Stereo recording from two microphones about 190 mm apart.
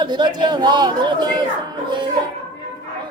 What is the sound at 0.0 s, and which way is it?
A man's voice, 25° right (ahead or behind).